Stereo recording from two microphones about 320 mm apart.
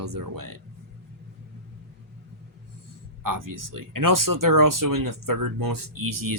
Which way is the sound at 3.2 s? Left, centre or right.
Right.